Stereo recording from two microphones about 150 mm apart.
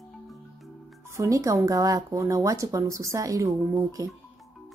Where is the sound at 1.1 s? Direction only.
20° right (ahead or behind).